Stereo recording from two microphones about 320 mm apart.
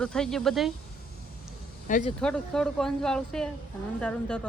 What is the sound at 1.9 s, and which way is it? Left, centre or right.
Speech, left.